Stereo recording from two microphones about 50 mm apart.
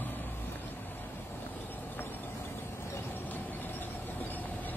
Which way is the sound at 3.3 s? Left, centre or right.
Left.